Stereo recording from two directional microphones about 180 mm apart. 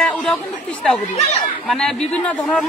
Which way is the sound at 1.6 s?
5° left (ahead or behind).